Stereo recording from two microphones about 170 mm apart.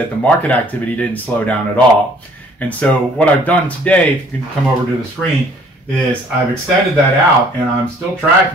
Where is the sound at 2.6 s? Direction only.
10° left (ahead or behind).